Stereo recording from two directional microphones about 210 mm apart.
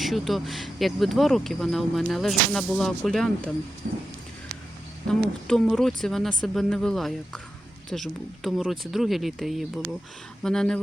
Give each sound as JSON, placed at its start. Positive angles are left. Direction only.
{"t": 0.0, "sound": "speech", "side_deg": 0}
{"t": 3.8, "sound": "a sound", "side_deg": -45}
{"t": 5.0, "sound": "speech", "side_deg": 0}